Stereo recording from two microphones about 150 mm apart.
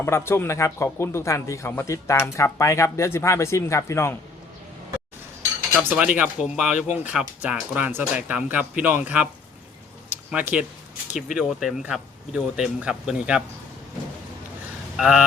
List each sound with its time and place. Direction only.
0.0 s speech: 15° left (ahead or behind)
5.8 s speech: 10° right (ahead or behind)
10.3 s speech: 10° right (ahead or behind)
14.9 s speech: 5° right (ahead or behind)